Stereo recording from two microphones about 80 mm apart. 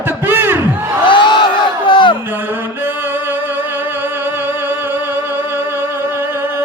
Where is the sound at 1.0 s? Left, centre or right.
Left.